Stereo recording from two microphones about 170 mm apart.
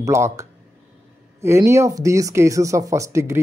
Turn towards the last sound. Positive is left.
turn(degrees=-15)  # may be behind; listen again after turning